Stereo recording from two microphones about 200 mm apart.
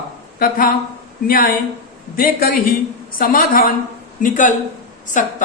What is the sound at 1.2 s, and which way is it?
A woman's voice, 45° left (ahead or behind).